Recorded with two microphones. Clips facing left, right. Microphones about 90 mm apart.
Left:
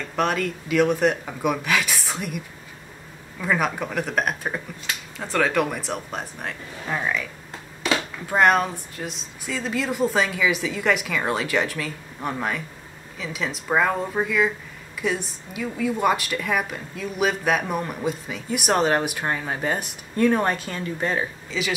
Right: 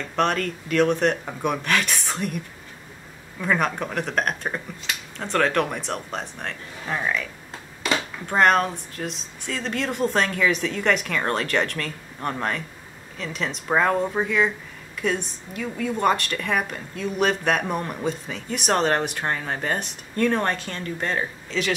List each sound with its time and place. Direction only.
0.1 s a woman's voice: 5° left (ahead or behind)